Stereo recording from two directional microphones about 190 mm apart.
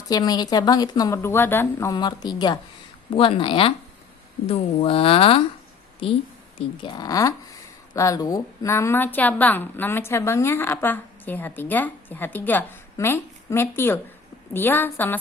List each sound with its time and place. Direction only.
0.1 s a woman's voice: 20° left (ahead or behind)
6.6 s a woman's voice: 20° left (ahead or behind)